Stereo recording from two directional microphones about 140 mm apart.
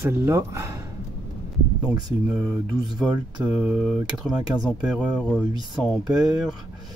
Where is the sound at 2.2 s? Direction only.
5° right (ahead or behind).